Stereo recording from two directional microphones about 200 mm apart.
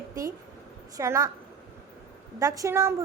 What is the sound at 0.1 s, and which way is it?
A woman's voice, 15° right (ahead or behind).